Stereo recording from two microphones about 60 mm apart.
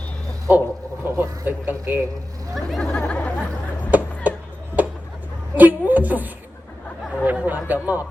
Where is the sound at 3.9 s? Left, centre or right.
Right.